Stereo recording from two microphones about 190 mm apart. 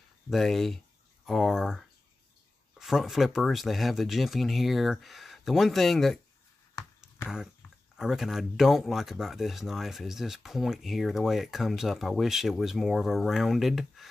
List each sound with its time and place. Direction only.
0.3 s speech: centre (ahead or behind)
8.0 s speech: centre (ahead or behind)